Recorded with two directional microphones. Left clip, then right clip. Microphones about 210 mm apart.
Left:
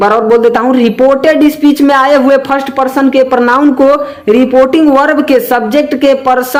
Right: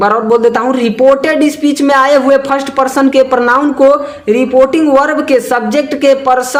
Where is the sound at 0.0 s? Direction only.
20° left (ahead or behind).